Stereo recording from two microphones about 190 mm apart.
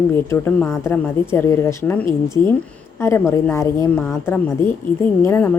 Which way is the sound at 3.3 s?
15° left (ahead or behind).